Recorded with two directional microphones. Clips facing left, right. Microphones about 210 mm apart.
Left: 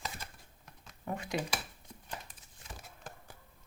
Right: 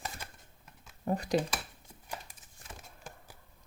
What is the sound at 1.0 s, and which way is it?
Speech, 35° right (ahead or behind).